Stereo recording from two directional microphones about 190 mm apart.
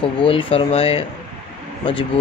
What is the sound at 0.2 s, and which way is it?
Speech, 30° left (ahead or behind).